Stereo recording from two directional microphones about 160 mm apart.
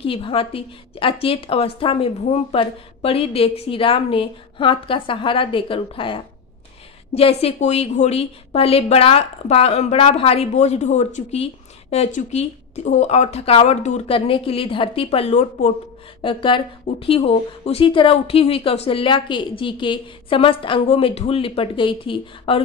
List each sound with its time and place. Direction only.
0.0 s a woman's voice: 35° left (ahead or behind)